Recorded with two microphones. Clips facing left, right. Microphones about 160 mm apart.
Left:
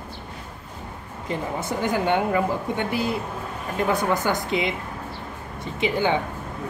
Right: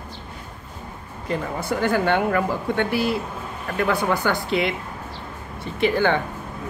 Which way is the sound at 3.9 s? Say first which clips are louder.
Even; 20° left (ahead or behind).